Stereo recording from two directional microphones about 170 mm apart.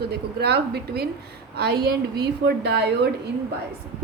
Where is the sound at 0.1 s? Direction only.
75° right (ahead or behind).